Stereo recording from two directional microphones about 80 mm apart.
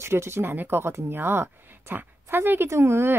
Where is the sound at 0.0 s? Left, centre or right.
Right.